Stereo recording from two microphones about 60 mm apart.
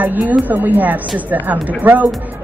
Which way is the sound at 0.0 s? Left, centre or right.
Right.